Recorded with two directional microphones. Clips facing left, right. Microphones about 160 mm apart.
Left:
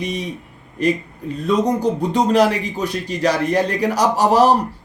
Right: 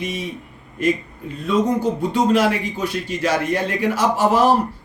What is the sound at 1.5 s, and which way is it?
Speech, 35° left (ahead or behind).